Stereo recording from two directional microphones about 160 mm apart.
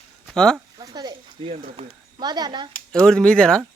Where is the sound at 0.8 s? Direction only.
25° right (ahead or behind).